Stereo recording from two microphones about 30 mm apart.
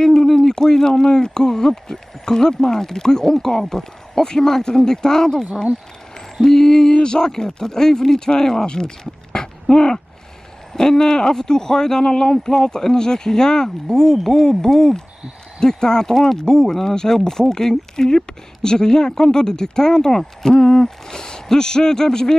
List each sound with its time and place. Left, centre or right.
0.0 s speech: centre
7.2 s speech: centre
20.5 s speech: left
20.8 s speech: centre